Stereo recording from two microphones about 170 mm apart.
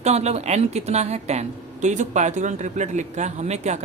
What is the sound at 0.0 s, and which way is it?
A woman's voice, 40° right (ahead or behind).